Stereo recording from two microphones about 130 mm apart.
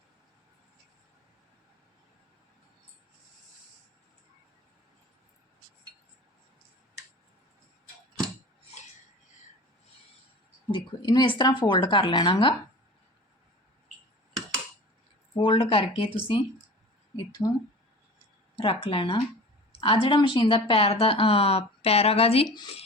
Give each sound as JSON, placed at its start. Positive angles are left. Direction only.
{"t": 10.7, "sound": "speech", "side_deg": 35}
{"t": 15.4, "sound": "speech", "side_deg": 45}
{"t": 17.4, "sound": "speech", "side_deg": 25}
{"t": 18.5, "sound": "speech", "side_deg": 45}